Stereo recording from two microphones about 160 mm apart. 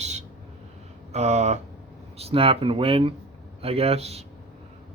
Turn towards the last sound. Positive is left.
turn(degrees=-40)  # may be behind; listen again after turning